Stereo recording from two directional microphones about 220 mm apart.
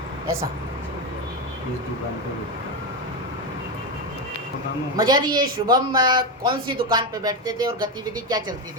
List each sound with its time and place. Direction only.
4.9 s a man's voice: 20° right (ahead or behind)